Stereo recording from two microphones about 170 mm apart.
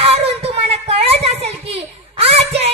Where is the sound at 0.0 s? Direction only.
35° right (ahead or behind).